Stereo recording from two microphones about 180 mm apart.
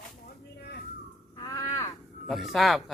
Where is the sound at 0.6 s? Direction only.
60° left (ahead or behind).